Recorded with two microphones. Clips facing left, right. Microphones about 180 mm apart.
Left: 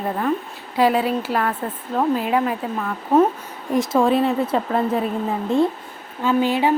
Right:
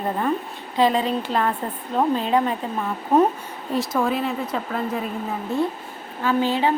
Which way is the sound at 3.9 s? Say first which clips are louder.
Left 6 dB; 30° left (ahead or behind).